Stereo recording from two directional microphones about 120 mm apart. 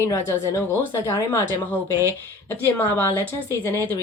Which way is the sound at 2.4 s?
15° left (ahead or behind).